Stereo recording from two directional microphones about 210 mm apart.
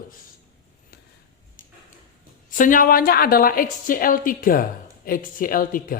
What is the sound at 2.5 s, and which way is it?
A woman's voice, 40° left (ahead or behind).